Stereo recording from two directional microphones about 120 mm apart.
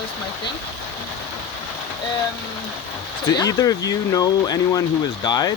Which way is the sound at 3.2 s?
30° left (ahead or behind).